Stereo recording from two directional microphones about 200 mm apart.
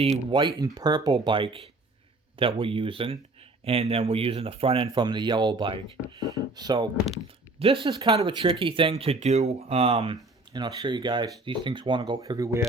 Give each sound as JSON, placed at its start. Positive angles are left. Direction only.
{"t": 0.0, "sound": "speech", "side_deg": -25}